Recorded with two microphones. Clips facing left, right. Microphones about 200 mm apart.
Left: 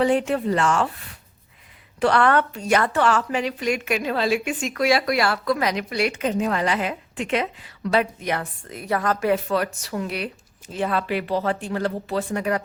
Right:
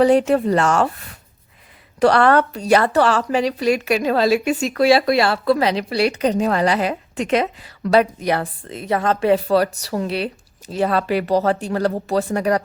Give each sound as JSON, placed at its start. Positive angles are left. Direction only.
{"t": 0.0, "sound": "a woman's voice", "side_deg": -40}